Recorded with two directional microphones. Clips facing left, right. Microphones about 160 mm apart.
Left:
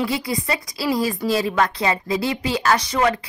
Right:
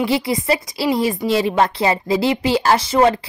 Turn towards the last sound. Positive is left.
turn(degrees=-30)  # may be behind; listen again after turning